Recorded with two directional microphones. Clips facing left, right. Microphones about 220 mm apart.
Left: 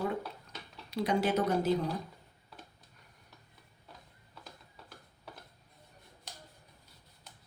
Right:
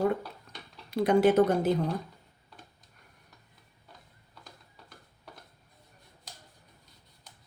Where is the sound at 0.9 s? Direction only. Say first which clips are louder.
Right 8 dB; 55° right (ahead or behind).